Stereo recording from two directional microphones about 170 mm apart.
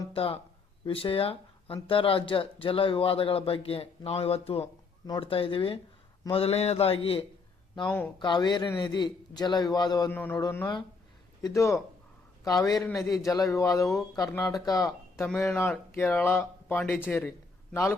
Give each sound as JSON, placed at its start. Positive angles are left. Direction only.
{"t": 0.1, "sound": "speech", "side_deg": 30}
{"t": 7.9, "sound": "speech", "side_deg": 10}
{"t": 8.2, "sound": "a man's voice", "side_deg": 25}
{"t": 10.1, "sound": "speech", "side_deg": 10}
{"t": 11.4, "sound": "a man's voice", "side_deg": 20}
{"t": 15.1, "sound": "a sound", "side_deg": 0}
{"t": 15.4, "sound": "a man's voice", "side_deg": 15}